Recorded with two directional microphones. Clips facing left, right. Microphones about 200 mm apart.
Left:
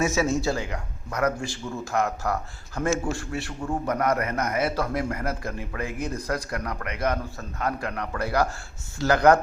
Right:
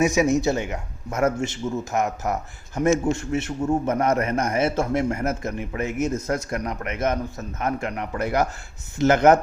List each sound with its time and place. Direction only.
0.0 s speech: 15° right (ahead or behind)